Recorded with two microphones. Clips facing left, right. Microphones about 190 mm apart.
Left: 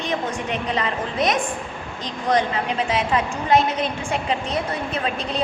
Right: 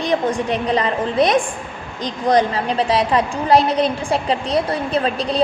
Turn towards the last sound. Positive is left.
turn(degrees=-35)  # may be behind; listen again after turning